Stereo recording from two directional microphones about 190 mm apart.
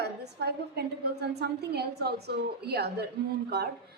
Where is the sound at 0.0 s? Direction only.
60° right (ahead or behind).